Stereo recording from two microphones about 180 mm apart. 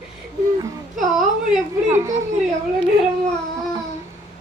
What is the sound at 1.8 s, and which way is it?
Speech, 15° right (ahead or behind).